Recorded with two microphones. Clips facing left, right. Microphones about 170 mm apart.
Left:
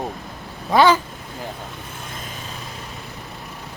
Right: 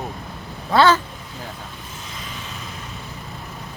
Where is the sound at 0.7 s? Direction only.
15° left (ahead or behind).